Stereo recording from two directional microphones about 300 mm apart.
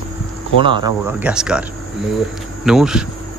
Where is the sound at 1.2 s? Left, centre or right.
Centre.